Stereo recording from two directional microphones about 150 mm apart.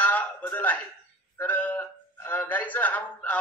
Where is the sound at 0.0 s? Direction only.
10° left (ahead or behind).